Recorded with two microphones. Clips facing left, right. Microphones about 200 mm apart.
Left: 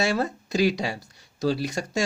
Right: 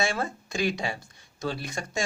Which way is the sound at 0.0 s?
40° left (ahead or behind).